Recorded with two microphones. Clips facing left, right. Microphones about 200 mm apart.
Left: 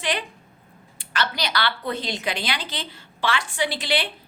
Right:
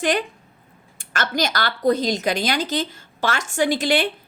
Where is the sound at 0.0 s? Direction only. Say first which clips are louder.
Right 6 dB; 45° right (ahead or behind).